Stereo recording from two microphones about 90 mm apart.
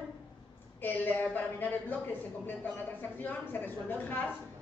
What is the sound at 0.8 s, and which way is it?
A woman's voice, 20° left (ahead or behind).